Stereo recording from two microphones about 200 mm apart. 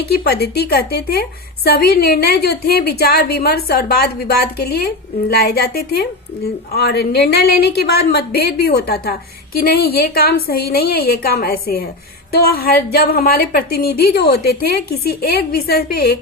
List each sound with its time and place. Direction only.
0.1 s a woman's voice: 55° left (ahead or behind)